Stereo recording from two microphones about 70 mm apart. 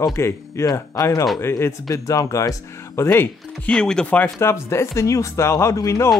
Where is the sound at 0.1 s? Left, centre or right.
Left.